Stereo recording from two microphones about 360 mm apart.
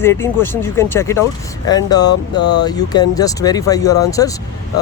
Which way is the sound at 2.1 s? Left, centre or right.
Left.